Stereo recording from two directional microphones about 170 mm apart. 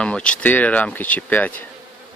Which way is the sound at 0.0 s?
5° left (ahead or behind).